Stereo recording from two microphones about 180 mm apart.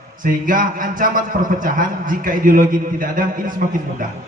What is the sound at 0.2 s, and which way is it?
A man's voice, 50° right (ahead or behind).